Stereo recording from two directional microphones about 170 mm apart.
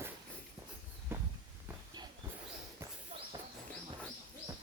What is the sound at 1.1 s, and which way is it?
Walk, 15° right (ahead or behind).